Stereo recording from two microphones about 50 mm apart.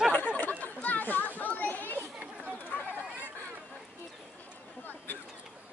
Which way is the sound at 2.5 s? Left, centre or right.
Left.